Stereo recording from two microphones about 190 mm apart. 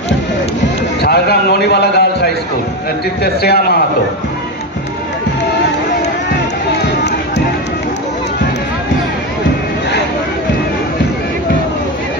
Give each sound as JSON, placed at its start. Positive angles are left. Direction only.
{"t": 1.0, "sound": "a man's voice", "side_deg": 60}